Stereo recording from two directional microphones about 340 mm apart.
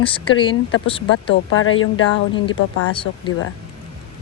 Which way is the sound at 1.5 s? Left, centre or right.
Left.